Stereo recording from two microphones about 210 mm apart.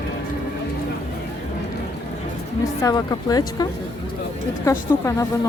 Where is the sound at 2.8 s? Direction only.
20° left (ahead or behind).